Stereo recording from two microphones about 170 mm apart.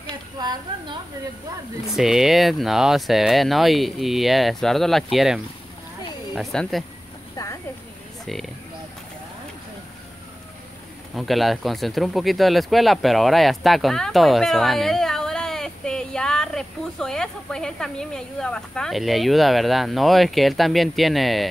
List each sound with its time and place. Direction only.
0.4 s a woman's voice: 25° right (ahead or behind)
1.9 s speech: centre (ahead or behind)
8.3 s speech: centre (ahead or behind)
11.1 s speech: centre (ahead or behind)